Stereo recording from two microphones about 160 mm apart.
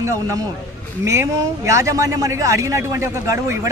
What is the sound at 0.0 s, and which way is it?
A man's voice, 20° right (ahead or behind).